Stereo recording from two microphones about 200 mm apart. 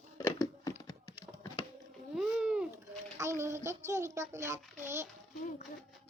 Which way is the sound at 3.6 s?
15° right (ahead or behind).